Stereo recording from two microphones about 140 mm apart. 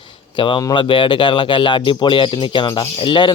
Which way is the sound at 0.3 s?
35° left (ahead or behind).